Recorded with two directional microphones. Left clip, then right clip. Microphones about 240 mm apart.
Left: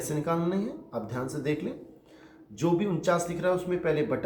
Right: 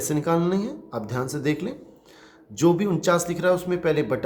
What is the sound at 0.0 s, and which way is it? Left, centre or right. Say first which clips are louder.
Speech: right 6 dB; right.